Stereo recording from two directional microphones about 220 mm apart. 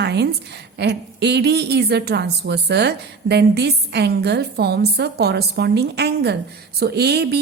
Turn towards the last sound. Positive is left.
turn(degrees=-50)  # may be behind; listen again after turning